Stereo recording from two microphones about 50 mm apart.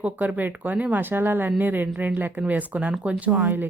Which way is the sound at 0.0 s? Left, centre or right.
Right.